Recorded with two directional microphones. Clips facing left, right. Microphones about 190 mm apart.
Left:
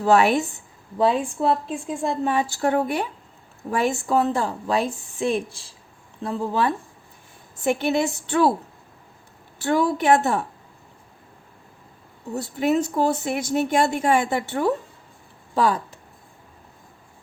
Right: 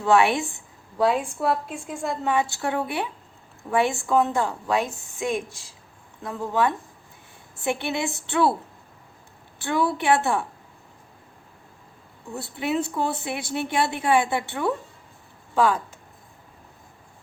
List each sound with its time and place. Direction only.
0.0 s a woman's voice: 40° left (ahead or behind)
0.9 s a woman's voice: 25° left (ahead or behind)
2.6 s a woman's voice: 40° left (ahead or behind)
7.6 s a woman's voice: 40° left (ahead or behind)
9.6 s a woman's voice: 40° left (ahead or behind)
12.3 s a woman's voice: 40° left (ahead or behind)